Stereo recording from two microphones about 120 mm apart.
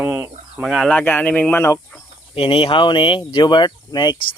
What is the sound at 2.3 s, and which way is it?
Speech, 50° left (ahead or behind).